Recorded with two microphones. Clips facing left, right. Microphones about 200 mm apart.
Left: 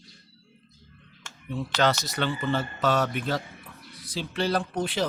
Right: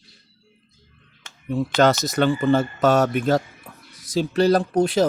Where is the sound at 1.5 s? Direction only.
45° right (ahead or behind).